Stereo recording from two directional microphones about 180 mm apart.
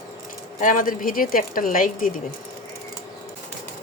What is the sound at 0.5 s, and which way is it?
Speech, 45° left (ahead or behind).